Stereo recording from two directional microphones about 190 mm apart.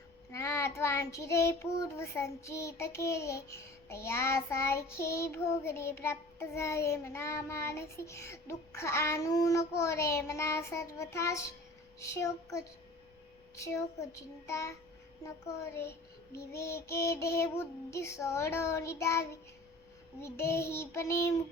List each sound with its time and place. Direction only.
0.3 s child singing: 15° left (ahead or behind)